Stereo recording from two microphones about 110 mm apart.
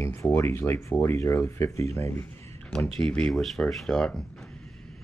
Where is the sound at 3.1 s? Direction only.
5° left (ahead or behind).